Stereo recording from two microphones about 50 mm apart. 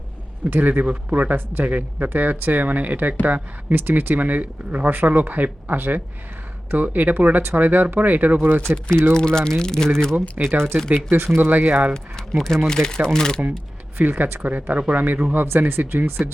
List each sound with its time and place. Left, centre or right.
0.5 s speech: right
9.1 s speech: centre
10.4 s speech: right
10.8 s speech: right
12.6 s speech: centre
14.0 s speech: right